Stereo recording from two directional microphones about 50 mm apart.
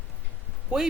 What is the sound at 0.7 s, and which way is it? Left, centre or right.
Speech, centre.